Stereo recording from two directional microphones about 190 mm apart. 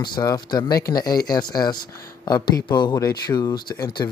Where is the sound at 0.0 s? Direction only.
20° left (ahead or behind).